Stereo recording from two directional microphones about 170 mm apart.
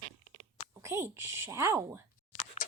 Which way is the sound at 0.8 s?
15° right (ahead or behind).